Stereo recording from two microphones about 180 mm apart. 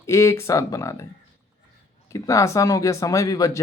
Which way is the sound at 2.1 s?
20° left (ahead or behind).